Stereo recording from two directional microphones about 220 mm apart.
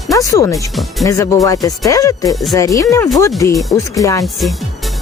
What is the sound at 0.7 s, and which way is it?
Speech, centre (ahead or behind).